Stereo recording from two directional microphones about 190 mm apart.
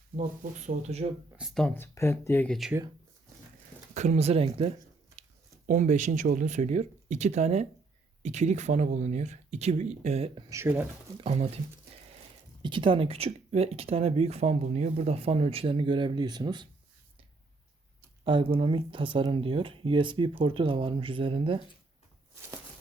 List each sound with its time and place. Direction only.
0.2 s speech: 40° right (ahead or behind)
1.4 s speech: centre (ahead or behind)
3.9 s speech: 40° right (ahead or behind)
10.5 s speech: 10° right (ahead or behind)
11.2 s speech: 35° right (ahead or behind)
12.6 s speech: 25° right (ahead or behind)
18.3 s speech: 25° right (ahead or behind)